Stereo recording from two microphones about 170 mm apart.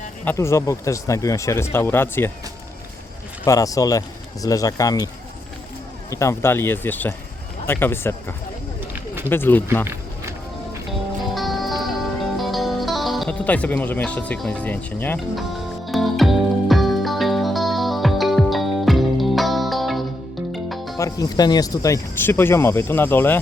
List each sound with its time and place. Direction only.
0.3 s speech: 15° left (ahead or behind)
3.4 s speech: 20° left (ahead or behind)
6.1 s speech: 15° left (ahead or behind)
9.8 s music: 15° right (ahead or behind)
11.3 s music: centre (ahead or behind)
12.4 s speech: centre (ahead or behind)
15.9 s music: centre (ahead or behind)
21.0 s speech: 20° left (ahead or behind)